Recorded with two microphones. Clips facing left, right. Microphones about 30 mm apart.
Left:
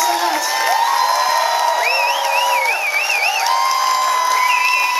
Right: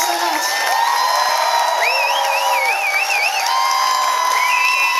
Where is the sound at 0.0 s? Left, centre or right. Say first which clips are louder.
Left 1 dB; centre.